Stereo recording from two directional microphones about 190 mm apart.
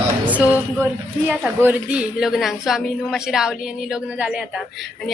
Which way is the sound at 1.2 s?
5° right (ahead or behind).